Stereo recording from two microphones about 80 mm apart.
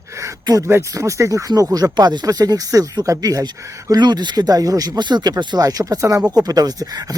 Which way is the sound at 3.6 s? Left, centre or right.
Right.